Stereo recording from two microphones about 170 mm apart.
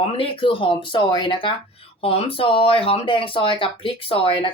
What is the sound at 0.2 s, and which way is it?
Speech, 30° left (ahead or behind).